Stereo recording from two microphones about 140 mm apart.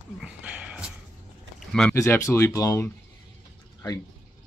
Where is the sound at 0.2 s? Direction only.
10° right (ahead or behind).